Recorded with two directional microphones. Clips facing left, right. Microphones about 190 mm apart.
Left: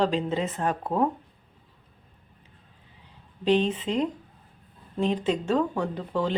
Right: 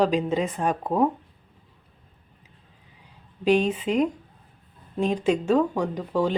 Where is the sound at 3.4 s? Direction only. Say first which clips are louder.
Right 2 dB; 10° right (ahead or behind).